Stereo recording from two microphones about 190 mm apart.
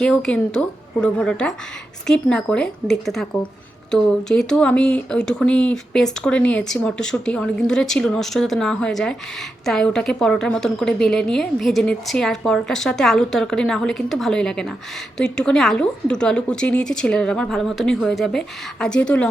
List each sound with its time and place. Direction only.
0.0 s speech: 5° left (ahead or behind)